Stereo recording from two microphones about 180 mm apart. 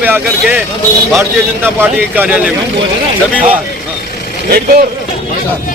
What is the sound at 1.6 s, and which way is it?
Speech, 10° right (ahead or behind).